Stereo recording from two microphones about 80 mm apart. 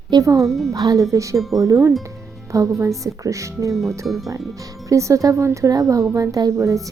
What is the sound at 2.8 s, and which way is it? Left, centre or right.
Speech, right.